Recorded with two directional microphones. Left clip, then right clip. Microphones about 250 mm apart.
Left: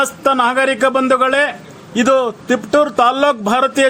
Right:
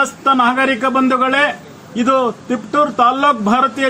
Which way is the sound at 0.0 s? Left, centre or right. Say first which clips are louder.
Right 1 dB; left.